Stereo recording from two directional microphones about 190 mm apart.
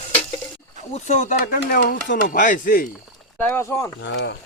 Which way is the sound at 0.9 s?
35° left (ahead or behind).